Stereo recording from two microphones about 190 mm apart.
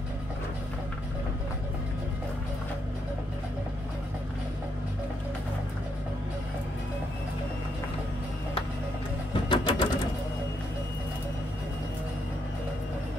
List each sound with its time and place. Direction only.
9.5 s music: 25° left (ahead or behind)